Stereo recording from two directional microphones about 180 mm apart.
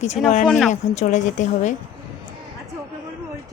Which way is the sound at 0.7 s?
40° left (ahead or behind).